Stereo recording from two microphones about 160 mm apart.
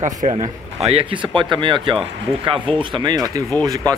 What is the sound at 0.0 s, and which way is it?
Speech, 50° right (ahead or behind).